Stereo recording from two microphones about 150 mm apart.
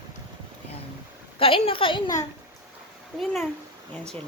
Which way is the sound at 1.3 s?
35° left (ahead or behind).